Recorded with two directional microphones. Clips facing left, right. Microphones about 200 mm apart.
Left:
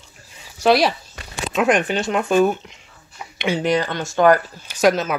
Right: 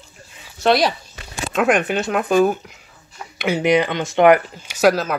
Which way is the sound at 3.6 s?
15° right (ahead or behind).